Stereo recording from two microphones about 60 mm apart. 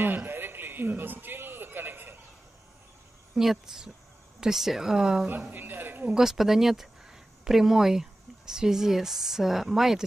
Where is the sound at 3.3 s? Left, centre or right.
Centre.